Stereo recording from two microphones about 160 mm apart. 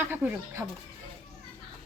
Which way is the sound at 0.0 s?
10° right (ahead or behind).